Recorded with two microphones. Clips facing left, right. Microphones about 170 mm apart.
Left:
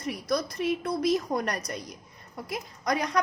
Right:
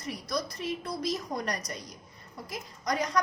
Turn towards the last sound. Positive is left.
turn(degrees=60)  # may be behind; listen again after turning